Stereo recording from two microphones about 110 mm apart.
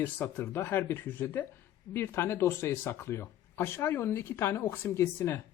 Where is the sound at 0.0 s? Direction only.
20° left (ahead or behind).